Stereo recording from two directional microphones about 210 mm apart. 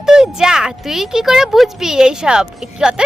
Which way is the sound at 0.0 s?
5° right (ahead or behind).